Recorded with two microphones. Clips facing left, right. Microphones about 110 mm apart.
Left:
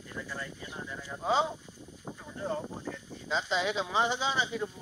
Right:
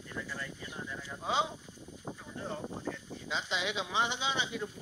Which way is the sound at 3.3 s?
40° left (ahead or behind).